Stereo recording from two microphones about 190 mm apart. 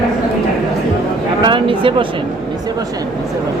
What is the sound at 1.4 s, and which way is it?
Speech, 25° right (ahead or behind).